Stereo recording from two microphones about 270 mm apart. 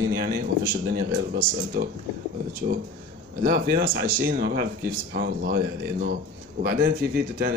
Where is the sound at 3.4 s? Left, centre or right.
Right.